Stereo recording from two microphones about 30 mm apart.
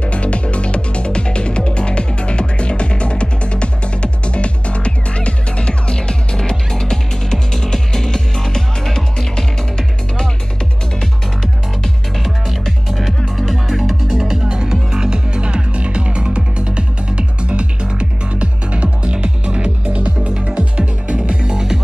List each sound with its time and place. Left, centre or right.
0.0 s music: left; by 10.3 s centre
12.3 s music: centre
13.5 s music: centre
14.0 s music: right
21.3 s music: right